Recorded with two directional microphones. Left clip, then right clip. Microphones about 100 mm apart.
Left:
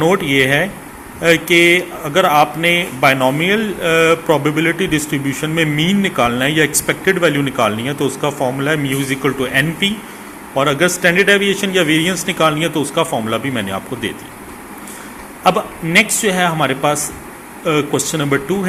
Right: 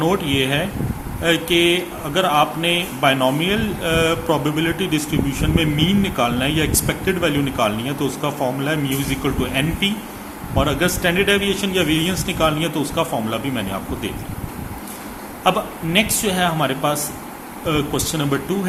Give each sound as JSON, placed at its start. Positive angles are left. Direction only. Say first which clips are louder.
{"t": 0.0, "sound": "speech", "louder": "left 6 dB", "side_deg": 40}
{"t": 15.4, "sound": "speech", "louder": "left 4 dB", "side_deg": 35}